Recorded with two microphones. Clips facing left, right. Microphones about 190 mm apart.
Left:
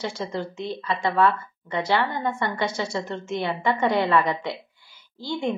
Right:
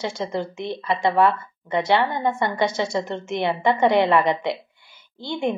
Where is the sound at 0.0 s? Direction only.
20° right (ahead or behind).